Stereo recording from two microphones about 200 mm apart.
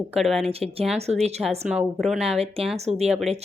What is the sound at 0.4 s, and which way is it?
Speech, 30° right (ahead or behind).